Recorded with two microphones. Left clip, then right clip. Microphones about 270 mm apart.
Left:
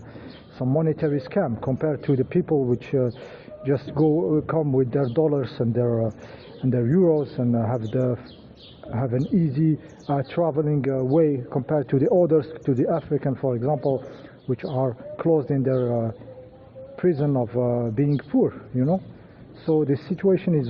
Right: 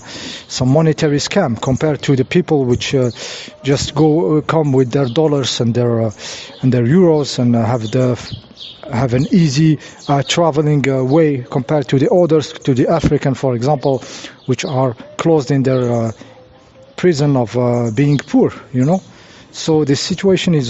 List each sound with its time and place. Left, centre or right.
0.2 s speech: right